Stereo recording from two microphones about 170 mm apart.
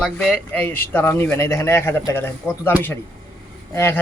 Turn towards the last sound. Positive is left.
turn(degrees=15)  # may be behind; listen again after turning